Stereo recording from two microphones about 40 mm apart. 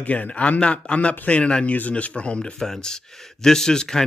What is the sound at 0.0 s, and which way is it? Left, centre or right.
A man's voice, left.